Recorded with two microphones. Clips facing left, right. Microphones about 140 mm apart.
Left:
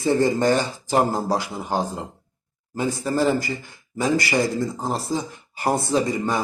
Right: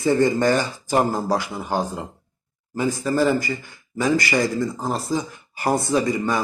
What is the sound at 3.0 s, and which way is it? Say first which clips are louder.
A man's voice: right 1 dB; 15° left (ahead or behind).